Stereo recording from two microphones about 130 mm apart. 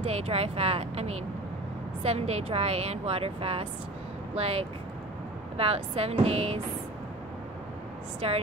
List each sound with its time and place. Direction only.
0.0 s speech: 50° right (ahead or behind)
8.2 s speech: 50° right (ahead or behind)